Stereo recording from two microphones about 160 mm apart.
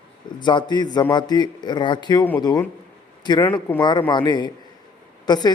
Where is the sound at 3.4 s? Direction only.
10° left (ahead or behind).